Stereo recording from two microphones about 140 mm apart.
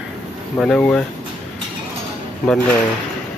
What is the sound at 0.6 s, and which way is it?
Speech, 5° left (ahead or behind).